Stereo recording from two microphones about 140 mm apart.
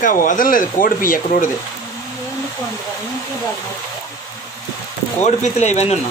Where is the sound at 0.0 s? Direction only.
75° left (ahead or behind).